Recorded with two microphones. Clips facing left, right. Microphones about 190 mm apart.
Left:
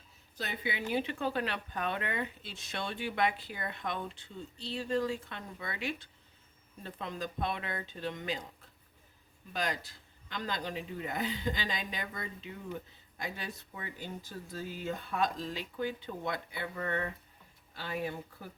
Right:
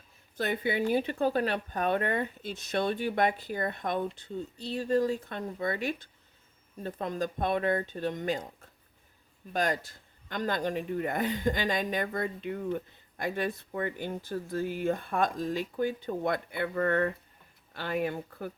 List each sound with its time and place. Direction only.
0.3 s speech: 50° right (ahead or behind)
9.5 s speech: 45° right (ahead or behind)